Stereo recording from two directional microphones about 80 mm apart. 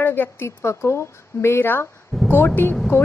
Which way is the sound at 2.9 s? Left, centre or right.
Left.